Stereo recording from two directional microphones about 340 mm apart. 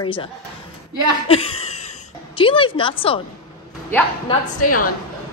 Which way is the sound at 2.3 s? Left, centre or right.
Centre.